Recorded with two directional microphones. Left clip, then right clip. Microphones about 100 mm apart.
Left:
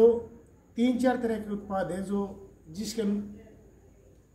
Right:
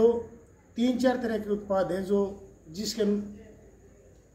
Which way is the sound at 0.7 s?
45° left (ahead or behind).